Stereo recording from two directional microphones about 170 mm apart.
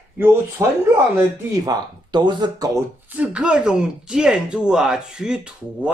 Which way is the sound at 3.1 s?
5° right (ahead or behind).